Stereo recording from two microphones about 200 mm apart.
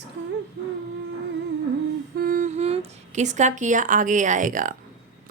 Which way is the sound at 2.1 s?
45° right (ahead or behind).